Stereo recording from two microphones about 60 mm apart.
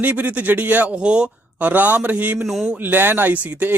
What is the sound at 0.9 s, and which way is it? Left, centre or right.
A man's voice, centre.